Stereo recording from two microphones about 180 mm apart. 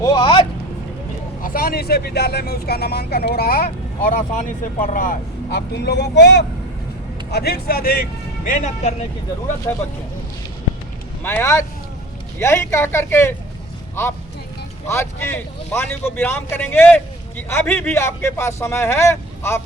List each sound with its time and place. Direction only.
0.0 s vehicle: 25° left (ahead or behind)
1.4 s speech: 50° left (ahead or behind)
8.4 s speech: 45° left (ahead or behind)
11.2 s speech: 10° left (ahead or behind)
14.8 s speech: 15° left (ahead or behind)